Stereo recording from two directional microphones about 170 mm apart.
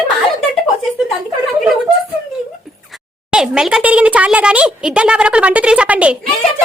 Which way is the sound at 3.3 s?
5° right (ahead or behind).